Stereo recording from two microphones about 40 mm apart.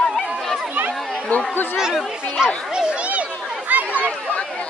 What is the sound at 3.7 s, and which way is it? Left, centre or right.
Chatter, right.